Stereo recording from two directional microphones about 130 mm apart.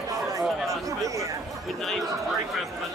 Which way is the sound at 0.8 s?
25° right (ahead or behind).